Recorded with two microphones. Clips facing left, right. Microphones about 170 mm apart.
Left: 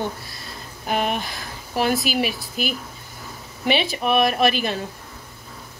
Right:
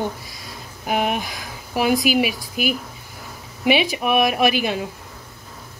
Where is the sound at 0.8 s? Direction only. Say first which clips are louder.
Right 2 dB; 10° right (ahead or behind).